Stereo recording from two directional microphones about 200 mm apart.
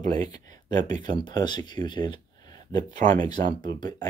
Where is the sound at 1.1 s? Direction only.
20° left (ahead or behind).